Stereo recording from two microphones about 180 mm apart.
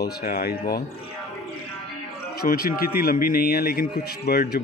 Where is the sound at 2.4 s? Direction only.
55° left (ahead or behind).